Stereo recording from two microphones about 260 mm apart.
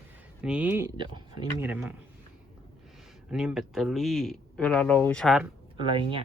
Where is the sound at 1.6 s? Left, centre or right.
Centre.